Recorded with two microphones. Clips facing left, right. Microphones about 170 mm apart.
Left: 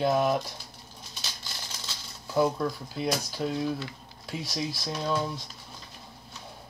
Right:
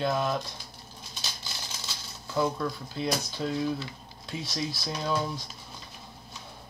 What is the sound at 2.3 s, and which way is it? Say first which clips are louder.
Speech: left 3 dB; 15° left (ahead or behind).